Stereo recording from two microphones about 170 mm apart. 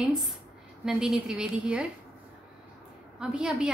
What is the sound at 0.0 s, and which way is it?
A woman's voice, 5° right (ahead or behind).